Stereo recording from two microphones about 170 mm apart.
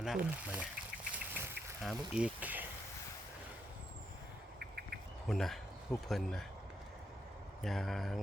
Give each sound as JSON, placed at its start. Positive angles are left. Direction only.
{"t": 0.0, "sound": "speech", "side_deg": -5}
{"t": 1.1, "sound": "duck", "side_deg": -10}
{"t": 1.8, "sound": "speech", "side_deg": 0}
{"t": 4.6, "sound": "cricket", "side_deg": -65}
{"t": 5.3, "sound": "speech", "side_deg": 0}
{"t": 7.6, "sound": "speech", "side_deg": 0}